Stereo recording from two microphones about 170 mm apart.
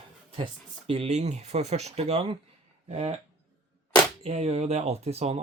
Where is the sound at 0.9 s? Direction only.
35° right (ahead or behind).